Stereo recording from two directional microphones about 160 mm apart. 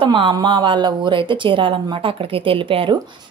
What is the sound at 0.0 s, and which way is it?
Speech, 30° right (ahead or behind).